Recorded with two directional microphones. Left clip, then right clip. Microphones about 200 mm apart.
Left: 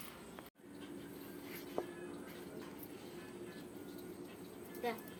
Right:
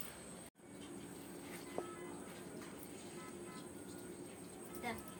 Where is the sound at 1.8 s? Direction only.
35° left (ahead or behind).